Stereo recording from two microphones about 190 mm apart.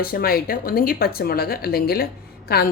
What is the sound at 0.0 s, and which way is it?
A woman's voice, 50° left (ahead or behind).